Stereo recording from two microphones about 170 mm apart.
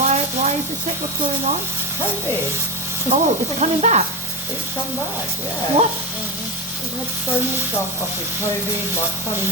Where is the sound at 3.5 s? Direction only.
40° right (ahead or behind).